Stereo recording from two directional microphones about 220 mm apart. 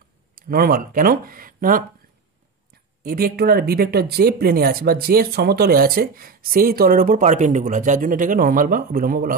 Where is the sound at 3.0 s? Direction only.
45° right (ahead or behind).